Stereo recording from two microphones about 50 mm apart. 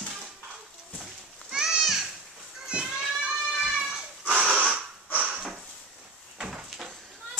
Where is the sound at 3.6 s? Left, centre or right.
Centre.